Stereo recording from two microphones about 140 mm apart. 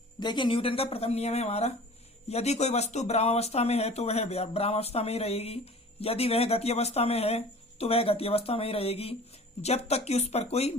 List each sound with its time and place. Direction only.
0.2 s speech: 35° left (ahead or behind); by 10.8 s 50° left (ahead or behind)